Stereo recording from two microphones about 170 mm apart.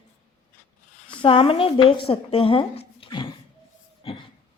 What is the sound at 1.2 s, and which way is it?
Speech, 30° left (ahead or behind).